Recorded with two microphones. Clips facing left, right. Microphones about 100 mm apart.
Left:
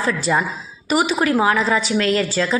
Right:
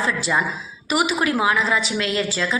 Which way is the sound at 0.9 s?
40° left (ahead or behind).